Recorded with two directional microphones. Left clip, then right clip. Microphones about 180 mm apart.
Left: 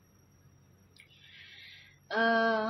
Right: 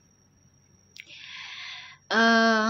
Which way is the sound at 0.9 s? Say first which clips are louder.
Right 13 dB; 40° right (ahead or behind).